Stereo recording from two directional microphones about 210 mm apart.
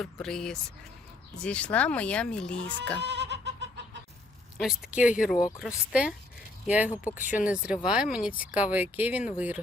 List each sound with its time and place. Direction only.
0.0 s speech: centre (ahead or behind)
3.0 s goat: 55° right (ahead or behind)
4.5 s speech: centre (ahead or behind)